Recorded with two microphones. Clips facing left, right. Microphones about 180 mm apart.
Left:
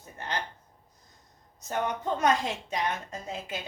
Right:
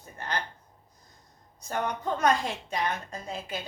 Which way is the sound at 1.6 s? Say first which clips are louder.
Left 1 dB; 20° left (ahead or behind).